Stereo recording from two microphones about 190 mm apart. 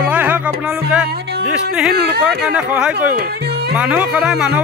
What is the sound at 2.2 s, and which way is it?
Speech, 5° right (ahead or behind).